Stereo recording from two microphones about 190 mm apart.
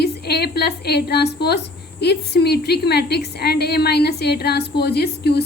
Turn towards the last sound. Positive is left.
turn(degrees=60)  # may be behind; listen again after turning